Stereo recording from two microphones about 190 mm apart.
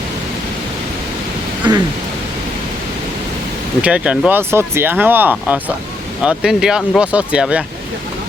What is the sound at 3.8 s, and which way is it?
Speech, 5° right (ahead or behind).